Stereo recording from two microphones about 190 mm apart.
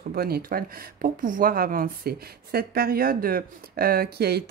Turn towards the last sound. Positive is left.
turn(degrees=-55)  # may be behind; listen again after turning